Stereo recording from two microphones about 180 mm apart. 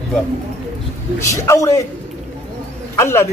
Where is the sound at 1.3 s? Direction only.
15° left (ahead or behind).